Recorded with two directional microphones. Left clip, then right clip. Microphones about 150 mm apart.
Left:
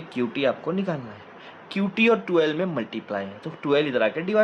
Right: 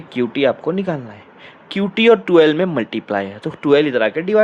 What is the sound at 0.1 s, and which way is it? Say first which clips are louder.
Speech: right 7 dB; 45° right (ahead or behind).